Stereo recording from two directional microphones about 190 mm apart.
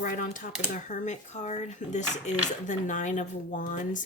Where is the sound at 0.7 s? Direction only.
45° left (ahead or behind).